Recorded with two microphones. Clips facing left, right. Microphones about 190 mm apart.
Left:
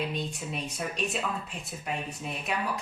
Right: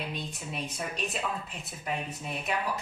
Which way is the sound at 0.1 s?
Centre (ahead or behind).